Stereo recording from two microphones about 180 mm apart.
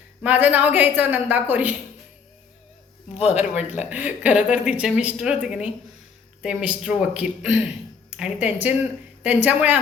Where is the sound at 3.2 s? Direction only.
35° left (ahead or behind).